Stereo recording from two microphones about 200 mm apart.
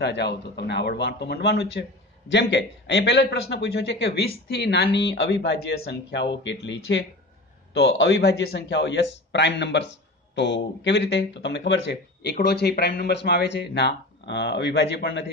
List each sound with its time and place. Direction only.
0.0 s speech: 55° left (ahead or behind)